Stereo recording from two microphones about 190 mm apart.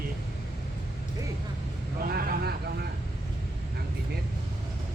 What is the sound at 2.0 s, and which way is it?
Vehicle, 55° right (ahead or behind).